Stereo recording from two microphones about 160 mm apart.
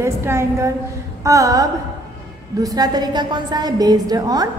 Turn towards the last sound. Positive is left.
turn(degrees=-25)  # may be behind; listen again after turning